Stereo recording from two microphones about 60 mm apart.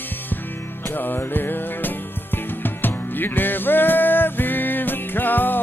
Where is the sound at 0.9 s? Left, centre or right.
Left.